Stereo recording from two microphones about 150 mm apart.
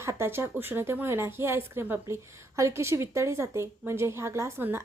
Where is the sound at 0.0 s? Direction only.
15° right (ahead or behind).